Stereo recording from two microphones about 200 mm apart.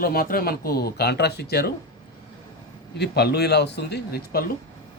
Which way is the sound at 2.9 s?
55° left (ahead or behind).